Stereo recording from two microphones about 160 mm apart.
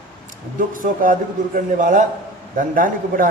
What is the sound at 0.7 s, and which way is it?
A man's voice, 60° right (ahead or behind).